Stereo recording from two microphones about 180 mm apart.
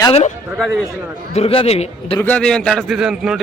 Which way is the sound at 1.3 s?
30° left (ahead or behind).